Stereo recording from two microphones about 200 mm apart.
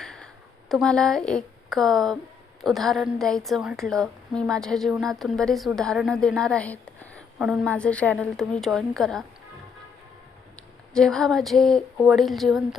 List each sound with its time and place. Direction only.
0.0 s a sound: 5° left (ahead or behind)
0.7 s a woman's voice: 5° left (ahead or behind)
10.9 s a woman's voice: 5° left (ahead or behind)